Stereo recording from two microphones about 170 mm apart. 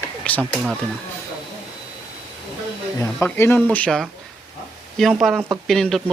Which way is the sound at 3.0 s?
15° left (ahead or behind).